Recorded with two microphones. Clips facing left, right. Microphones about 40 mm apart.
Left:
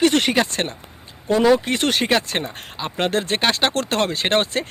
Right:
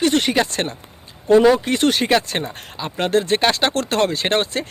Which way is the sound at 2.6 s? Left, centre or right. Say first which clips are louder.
Even; left.